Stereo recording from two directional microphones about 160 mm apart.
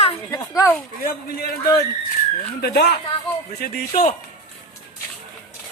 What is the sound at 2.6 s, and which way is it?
Speech, 85° left.